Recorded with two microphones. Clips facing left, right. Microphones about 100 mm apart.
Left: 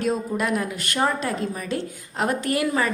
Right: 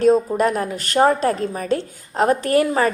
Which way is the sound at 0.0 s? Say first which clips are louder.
Right 9 dB; 35° right (ahead or behind).